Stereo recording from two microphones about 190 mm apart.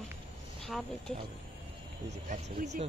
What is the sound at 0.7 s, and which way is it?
Speech, centre (ahead or behind).